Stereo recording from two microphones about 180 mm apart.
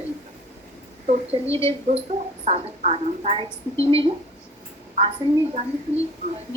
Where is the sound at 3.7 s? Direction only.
15° left (ahead or behind).